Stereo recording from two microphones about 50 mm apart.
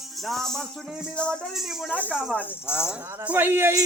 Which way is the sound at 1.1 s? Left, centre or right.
Centre.